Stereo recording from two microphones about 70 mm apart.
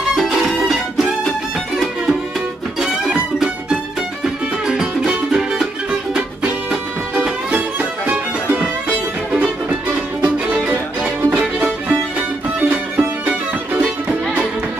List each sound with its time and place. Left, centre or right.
0.1 s music: centre
2.8 s music: centre
8.1 s music: right